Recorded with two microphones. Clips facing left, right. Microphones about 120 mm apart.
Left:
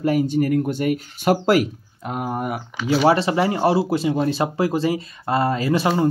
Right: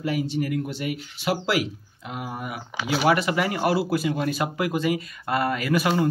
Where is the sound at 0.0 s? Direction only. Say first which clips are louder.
Left 7 dB; 45° left (ahead or behind).